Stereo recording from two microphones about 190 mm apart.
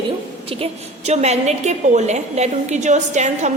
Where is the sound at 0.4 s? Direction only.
30° right (ahead or behind).